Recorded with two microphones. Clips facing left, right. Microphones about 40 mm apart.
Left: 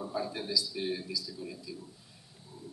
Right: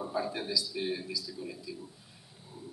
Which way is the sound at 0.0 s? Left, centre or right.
Centre.